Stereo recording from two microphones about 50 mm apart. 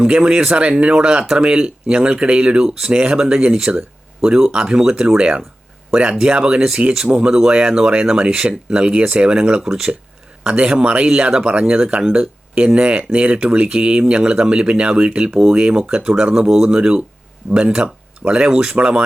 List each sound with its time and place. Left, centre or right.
0.0 s speech: centre
10.4 s speech: right
18.3 s speech: centre